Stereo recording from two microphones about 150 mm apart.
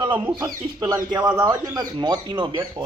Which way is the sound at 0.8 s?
25° right (ahead or behind).